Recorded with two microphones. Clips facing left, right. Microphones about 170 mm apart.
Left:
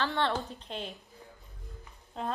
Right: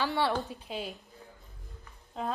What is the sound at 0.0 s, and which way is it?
Speech, 15° right (ahead or behind).